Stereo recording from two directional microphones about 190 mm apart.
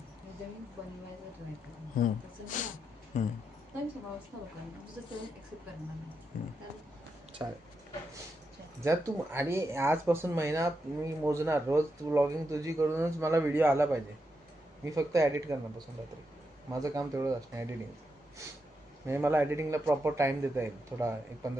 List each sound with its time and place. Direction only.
2.5 s speech: 40° left (ahead or behind)
6.3 s speech: 40° left (ahead or behind)
7.4 s speech: 15° right (ahead or behind)
8.8 s speech: 15° right (ahead or behind)
16.8 s speech: 20° right (ahead or behind)
19.0 s speech: 15° right (ahead or behind)